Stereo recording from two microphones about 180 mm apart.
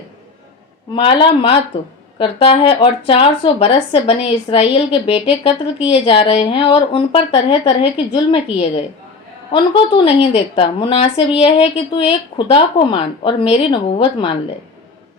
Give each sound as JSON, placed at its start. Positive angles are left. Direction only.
{"t": 0.9, "sound": "a woman's voice", "side_deg": 30}
{"t": 10.0, "sound": "a woman's voice", "side_deg": 35}